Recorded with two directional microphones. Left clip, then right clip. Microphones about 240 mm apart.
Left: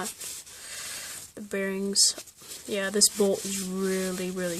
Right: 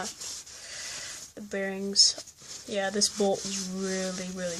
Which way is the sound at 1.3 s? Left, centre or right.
Left.